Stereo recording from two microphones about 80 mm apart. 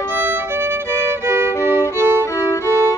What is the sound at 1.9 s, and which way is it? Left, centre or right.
Music, right.